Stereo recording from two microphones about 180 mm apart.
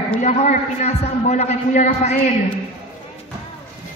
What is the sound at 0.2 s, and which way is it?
A man's voice, 40° left (ahead or behind).